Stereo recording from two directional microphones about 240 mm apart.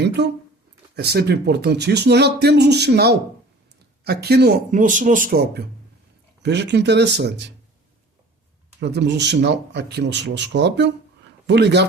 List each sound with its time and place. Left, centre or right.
0.9 s speech: right
8.8 s speech: right